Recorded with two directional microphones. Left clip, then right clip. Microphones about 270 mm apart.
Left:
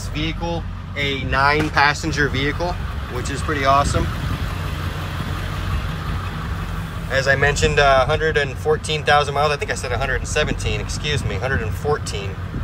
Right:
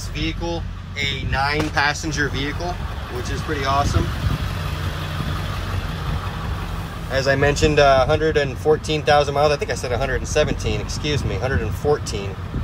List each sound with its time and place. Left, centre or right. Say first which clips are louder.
1.3 s speech: left 5 dB; centre
7.1 s speech: left 1 dB; right